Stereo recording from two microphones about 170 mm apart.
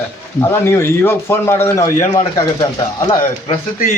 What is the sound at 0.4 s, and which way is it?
Speech, 15° left (ahead or behind).